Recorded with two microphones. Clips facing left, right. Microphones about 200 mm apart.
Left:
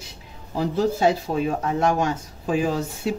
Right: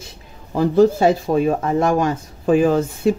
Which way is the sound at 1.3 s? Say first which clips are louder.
Right 6 dB; 65° right (ahead or behind).